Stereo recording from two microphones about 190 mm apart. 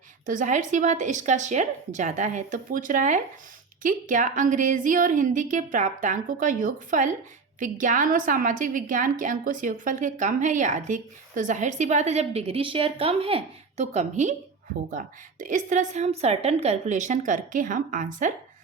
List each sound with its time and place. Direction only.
0.3 s a woman's voice: 40° right (ahead or behind)